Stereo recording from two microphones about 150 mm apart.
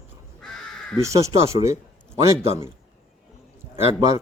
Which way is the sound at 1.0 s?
20° right (ahead or behind).